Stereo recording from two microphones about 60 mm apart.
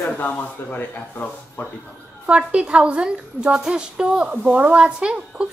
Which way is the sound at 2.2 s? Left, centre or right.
Centre.